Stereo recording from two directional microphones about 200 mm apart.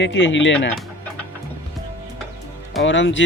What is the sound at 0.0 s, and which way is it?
Speech, 65° left (ahead or behind).